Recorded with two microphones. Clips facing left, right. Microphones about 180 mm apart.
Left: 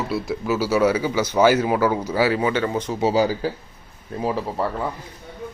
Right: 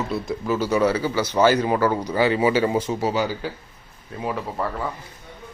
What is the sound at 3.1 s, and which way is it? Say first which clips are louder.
Speech: left 5 dB; 35° left (ahead or behind).